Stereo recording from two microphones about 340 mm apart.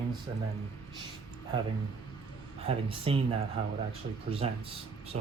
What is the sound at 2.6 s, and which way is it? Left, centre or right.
Speech, centre.